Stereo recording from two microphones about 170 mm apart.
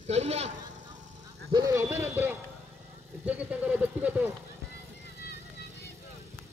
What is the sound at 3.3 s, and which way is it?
Speech, 5° right (ahead or behind).